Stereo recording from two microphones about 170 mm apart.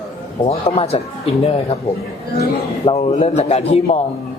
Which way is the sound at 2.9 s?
35° left (ahead or behind).